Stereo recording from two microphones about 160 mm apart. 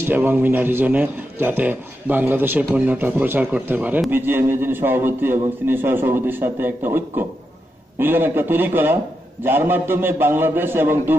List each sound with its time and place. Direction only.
0.0 s a man's voice: 15° right (ahead or behind)